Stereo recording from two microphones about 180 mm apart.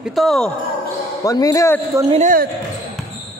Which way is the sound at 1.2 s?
20° left (ahead or behind).